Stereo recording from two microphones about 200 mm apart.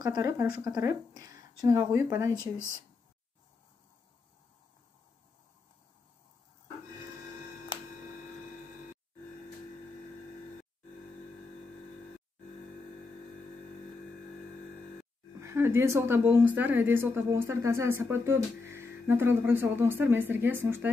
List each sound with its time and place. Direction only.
0.0 s a woman's voice: 20° right (ahead or behind)
2.3 s speech: 15° left (ahead or behind)
15.4 s a woman's voice: 10° right (ahead or behind)